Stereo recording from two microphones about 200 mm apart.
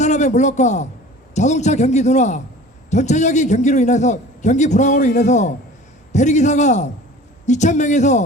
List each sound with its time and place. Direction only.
0.0 s a man's voice: 35° left (ahead or behind)